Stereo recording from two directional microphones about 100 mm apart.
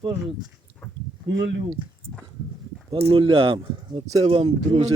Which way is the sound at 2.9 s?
65° right (ahead or behind).